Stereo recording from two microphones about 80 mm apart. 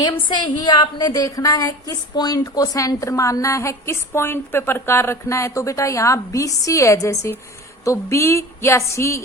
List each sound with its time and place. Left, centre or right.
0.0 s a woman's voice: left